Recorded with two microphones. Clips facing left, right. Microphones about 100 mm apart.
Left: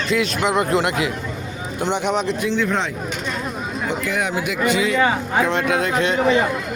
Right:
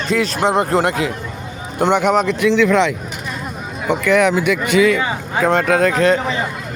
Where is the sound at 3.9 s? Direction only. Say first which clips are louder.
Right 10 dB; 65° right (ahead or behind).